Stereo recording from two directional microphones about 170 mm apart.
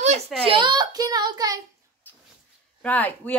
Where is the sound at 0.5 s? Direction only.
25° right (ahead or behind).